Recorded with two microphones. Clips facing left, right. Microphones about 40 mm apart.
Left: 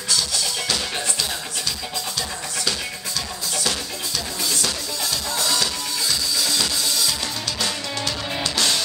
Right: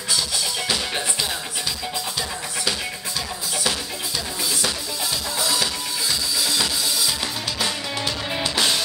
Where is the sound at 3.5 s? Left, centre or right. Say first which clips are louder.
Even; centre.